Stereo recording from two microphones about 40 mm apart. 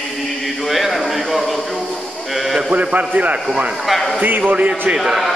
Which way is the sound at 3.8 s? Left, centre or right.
Centre.